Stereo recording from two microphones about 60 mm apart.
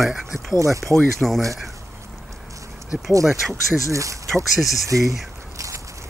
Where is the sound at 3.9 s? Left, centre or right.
Right.